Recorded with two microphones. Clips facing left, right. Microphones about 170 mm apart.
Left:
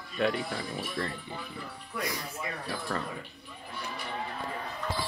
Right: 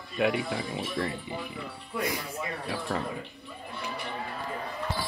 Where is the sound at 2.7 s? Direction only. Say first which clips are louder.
Right 3 dB; 15° right (ahead or behind).